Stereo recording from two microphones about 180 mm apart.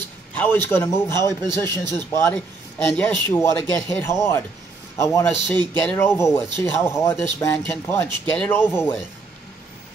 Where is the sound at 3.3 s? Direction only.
15° left (ahead or behind).